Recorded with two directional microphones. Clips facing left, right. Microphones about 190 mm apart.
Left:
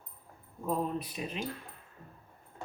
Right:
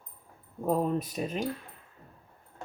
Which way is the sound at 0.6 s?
45° right (ahead or behind).